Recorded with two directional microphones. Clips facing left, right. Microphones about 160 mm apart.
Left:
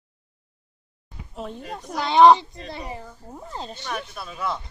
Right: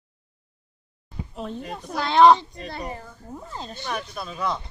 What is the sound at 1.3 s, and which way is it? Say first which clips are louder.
Speech: even; centre (ahead or behind).